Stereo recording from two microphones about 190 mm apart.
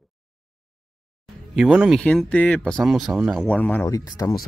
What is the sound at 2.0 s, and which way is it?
Speech, 5° left (ahead or behind).